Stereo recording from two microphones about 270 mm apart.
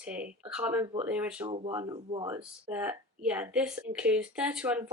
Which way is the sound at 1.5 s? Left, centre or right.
Right.